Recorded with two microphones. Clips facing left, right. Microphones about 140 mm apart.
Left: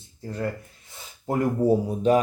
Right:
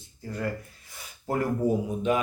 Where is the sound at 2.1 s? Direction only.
35° left (ahead or behind).